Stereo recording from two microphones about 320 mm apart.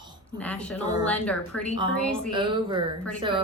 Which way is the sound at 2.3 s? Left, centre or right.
Centre.